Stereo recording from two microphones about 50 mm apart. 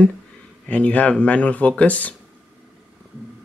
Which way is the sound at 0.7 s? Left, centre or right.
Left.